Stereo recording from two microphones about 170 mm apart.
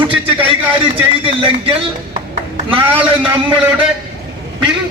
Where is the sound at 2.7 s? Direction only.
30° right (ahead or behind).